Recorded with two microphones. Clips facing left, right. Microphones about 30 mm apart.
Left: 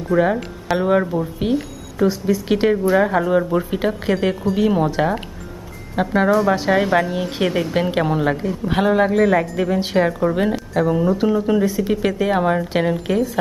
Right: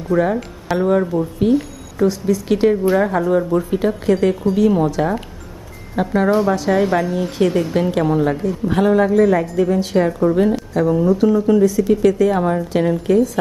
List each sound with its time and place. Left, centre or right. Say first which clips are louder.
0.1 s speech: even; centre
1.0 s a woman's voice: right 4 dB; centre; by 13.3 s left